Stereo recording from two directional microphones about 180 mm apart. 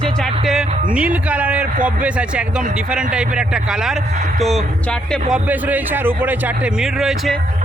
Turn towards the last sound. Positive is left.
turn(degrees=0)  # may be behind; listen again after turning